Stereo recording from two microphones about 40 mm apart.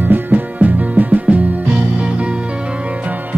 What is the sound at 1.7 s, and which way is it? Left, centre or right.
Music, right.